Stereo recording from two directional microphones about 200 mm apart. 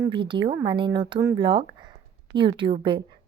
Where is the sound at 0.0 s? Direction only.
25° right (ahead or behind).